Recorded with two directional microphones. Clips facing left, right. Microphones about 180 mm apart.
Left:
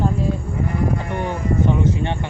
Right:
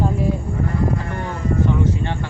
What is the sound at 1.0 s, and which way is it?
Speech, 20° left (ahead or behind).